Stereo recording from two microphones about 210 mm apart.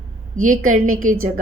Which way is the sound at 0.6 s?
90° right.